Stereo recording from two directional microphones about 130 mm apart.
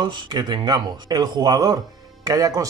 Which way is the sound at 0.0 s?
35° right (ahead or behind).